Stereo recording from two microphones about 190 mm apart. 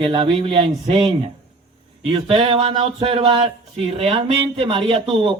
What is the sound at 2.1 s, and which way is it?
A man's voice, 25° right (ahead or behind).